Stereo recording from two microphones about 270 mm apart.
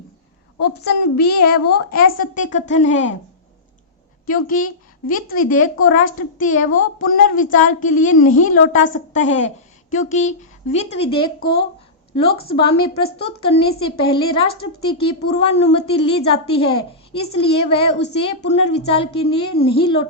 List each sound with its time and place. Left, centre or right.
0.7 s a woman's voice: left
4.3 s a woman's voice: left